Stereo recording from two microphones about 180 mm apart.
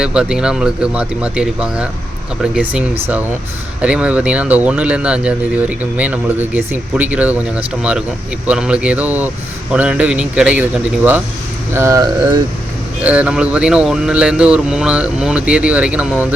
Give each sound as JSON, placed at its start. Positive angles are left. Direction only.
{"t": 0.0, "sound": "speech", "side_deg": -5}